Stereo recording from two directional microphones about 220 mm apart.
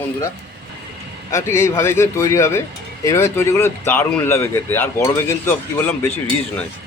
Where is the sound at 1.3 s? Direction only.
10° left (ahead or behind).